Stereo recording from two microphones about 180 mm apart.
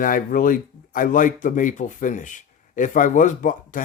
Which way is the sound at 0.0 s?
50° left (ahead or behind).